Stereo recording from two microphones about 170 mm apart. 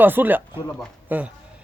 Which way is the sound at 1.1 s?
10° right (ahead or behind).